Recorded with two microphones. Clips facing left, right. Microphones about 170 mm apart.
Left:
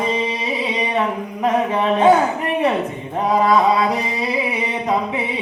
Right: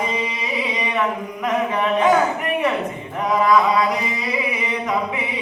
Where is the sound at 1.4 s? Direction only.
30° left (ahead or behind).